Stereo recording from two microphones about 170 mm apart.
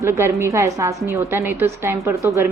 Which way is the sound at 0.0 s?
15° right (ahead or behind).